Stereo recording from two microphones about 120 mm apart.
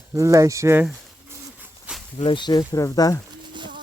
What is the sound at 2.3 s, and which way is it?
Speech, 35° left (ahead or behind).